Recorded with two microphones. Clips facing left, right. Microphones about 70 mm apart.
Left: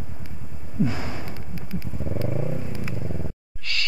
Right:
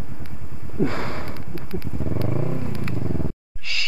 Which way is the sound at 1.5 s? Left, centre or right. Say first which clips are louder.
Right 2 dB; centre.